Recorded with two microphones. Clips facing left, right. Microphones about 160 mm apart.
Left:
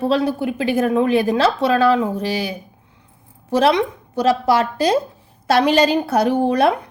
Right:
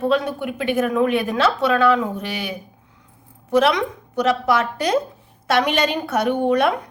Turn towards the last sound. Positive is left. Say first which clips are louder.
# left 2 dB
turn(degrees=35)  # may be behind; listen again after turning